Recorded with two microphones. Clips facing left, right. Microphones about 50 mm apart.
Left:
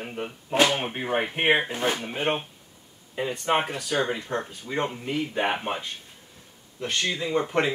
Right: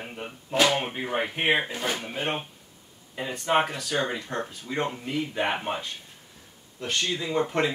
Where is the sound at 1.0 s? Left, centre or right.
Left.